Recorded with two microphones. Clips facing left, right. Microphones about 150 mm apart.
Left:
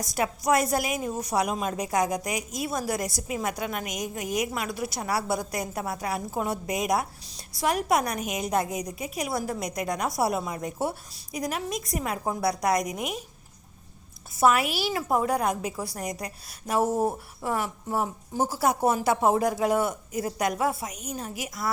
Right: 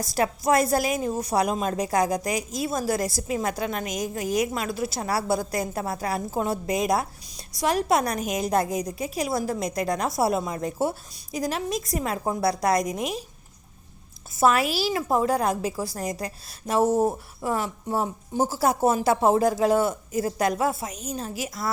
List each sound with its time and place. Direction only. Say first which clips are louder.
0.0 s a woman's voice: right 3 dB; 30° right (ahead or behind)
12.8 s a woman's voice: right 3 dB; 15° left (ahead or behind)
14.3 s a woman's voice: right 1 dB; 30° right (ahead or behind)
16.9 s speech: right 4 dB; centre (ahead or behind)
17.4 s a woman's voice: right 2 dB; 25° right (ahead or behind)